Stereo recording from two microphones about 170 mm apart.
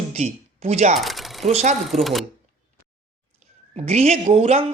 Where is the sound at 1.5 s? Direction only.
40° right (ahead or behind).